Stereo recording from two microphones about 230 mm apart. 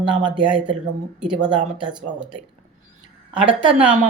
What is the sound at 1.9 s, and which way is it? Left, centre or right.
Speech, centre.